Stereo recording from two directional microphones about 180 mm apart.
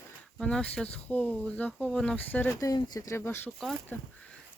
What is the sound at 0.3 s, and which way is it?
Speech, 5° left (ahead or behind).